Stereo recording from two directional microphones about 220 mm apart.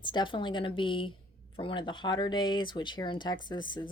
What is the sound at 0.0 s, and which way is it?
Speech, 20° left (ahead or behind).